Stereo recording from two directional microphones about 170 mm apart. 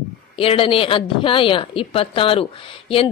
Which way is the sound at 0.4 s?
30° left (ahead or behind).